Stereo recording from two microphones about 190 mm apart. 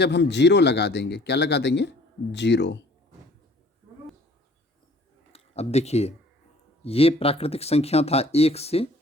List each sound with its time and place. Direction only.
0.0 s speech: 65° left (ahead or behind)
5.3 s speech: 35° left (ahead or behind)